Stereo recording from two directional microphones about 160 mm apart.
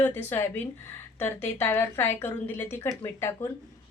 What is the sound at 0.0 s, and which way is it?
A woman's voice, 10° left (ahead or behind).